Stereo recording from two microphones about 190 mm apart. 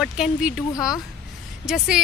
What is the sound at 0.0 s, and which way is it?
A woman's voice, 5° right (ahead or behind).